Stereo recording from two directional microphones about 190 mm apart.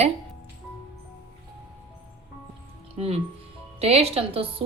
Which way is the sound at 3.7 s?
30° right (ahead or behind).